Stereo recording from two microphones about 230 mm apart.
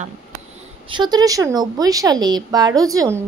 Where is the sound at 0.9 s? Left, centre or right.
Centre.